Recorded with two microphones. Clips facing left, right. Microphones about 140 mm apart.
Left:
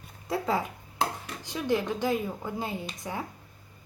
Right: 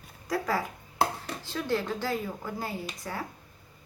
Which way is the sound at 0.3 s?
25° left (ahead or behind).